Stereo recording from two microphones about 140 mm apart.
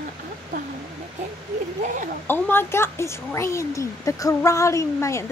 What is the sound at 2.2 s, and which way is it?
A woman's voice, 15° left (ahead or behind).